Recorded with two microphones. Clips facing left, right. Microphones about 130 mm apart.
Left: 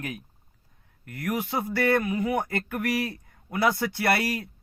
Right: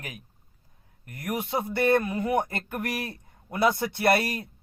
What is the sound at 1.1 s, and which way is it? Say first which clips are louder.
Speech: left 1 dB; 25° right (ahead or behind).